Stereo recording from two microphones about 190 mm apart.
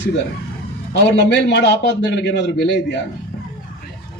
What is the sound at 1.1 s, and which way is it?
A man's voice, 65° left (ahead or behind).